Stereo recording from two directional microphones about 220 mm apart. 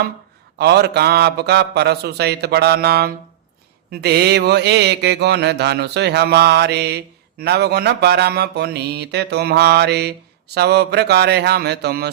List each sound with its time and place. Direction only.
0.6 s mantra: 50° right (ahead or behind)